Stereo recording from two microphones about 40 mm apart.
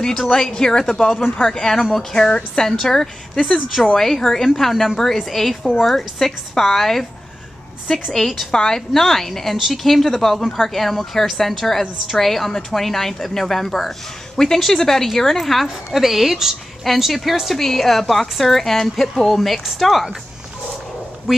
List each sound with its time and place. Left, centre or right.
0.3 s a woman's voice: centre
2.1 s a woman's voice: centre
3.6 s a woman's voice: centre
8.1 s a woman's voice: centre
8.5 s a woman's voice: centre
8.7 s a woman's voice: centre
21.3 s speech: centre